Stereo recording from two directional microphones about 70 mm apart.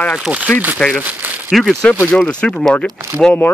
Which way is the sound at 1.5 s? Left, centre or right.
Centre.